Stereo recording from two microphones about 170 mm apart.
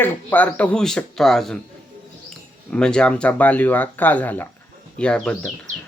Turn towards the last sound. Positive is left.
turn(degrees=5)  # may be behind; listen again after turning